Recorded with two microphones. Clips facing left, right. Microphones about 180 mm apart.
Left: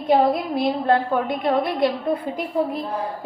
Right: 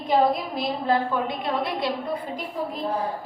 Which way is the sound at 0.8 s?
55° left (ahead or behind).